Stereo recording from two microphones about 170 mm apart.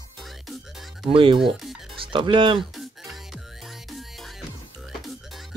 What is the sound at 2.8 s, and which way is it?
Music, centre (ahead or behind).